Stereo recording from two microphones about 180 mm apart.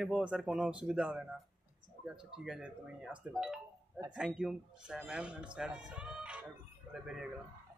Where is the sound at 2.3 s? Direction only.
5° right (ahead or behind).